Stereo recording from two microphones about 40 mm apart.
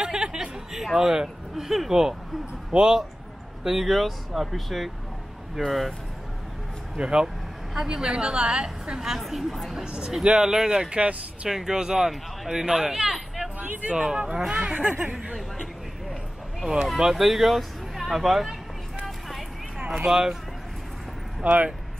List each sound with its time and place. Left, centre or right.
0.0 s a sound: centre
0.8 s speech: centre
3.6 s speech: centre
7.0 s a woman's voice: right
9.1 s speech: centre
9.8 s a woman's voice: right
13.6 s speech: right
13.9 s a woman's voice: right
14.9 s speech: right
16.6 s speech: centre
19.0 s vehicle: centre
19.8 s a sound: right
20.1 s speech: centre
21.4 s a woman's voice: right